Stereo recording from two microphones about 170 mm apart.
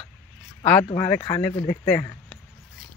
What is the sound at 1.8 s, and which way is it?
Speech, 10° left (ahead or behind).